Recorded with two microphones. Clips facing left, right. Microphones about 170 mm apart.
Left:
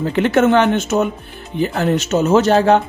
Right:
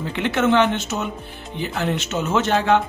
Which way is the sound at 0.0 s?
45° left (ahead or behind).